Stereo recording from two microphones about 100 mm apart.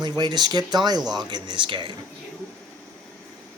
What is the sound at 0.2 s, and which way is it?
Speech, 45° right (ahead or behind).